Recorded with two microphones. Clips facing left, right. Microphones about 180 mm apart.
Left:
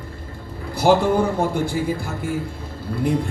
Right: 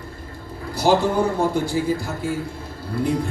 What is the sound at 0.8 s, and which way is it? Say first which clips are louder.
Speech: left 2 dB; 55° left (ahead or behind).